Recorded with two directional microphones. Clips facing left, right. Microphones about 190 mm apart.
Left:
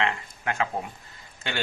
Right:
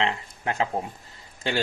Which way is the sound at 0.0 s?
20° right (ahead or behind).